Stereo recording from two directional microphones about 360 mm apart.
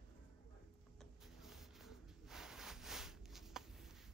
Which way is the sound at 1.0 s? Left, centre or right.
Centre.